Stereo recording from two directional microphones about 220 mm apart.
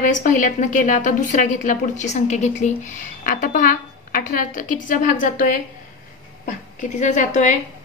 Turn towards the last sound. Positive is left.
turn(degrees=35)  # may be behind; listen again after turning